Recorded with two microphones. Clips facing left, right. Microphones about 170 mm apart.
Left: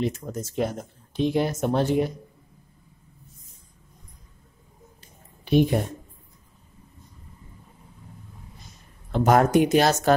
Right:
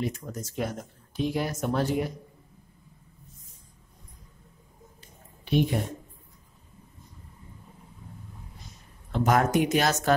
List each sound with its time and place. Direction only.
0.0 s speech: 25° left (ahead or behind)
5.4 s a woman's voice: 40° left (ahead or behind)
9.2 s speech: 35° left (ahead or behind)